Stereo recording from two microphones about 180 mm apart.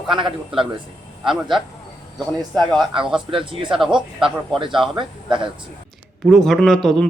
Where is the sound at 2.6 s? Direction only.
25° right (ahead or behind).